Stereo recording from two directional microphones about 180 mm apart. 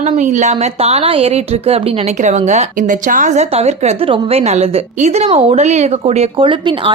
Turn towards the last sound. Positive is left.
turn(degrees=-30)  # may be behind; listen again after turning